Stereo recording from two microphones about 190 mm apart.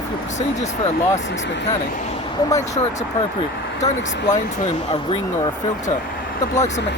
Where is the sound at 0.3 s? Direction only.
40° left (ahead or behind).